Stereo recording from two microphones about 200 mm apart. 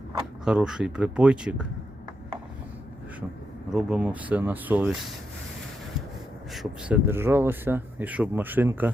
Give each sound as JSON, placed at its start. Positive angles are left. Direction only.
{"t": 0.4, "sound": "speech", "side_deg": -5}
{"t": 3.7, "sound": "speech", "side_deg": -5}
{"t": 6.5, "sound": "speech", "side_deg": -5}